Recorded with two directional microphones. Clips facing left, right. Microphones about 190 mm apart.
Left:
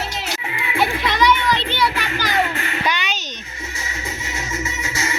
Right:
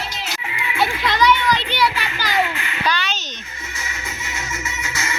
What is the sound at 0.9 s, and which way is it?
Children playing, 25° left (ahead or behind).